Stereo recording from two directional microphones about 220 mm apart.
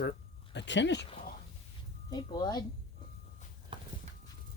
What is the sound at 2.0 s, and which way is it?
Speech, 20° left (ahead or behind).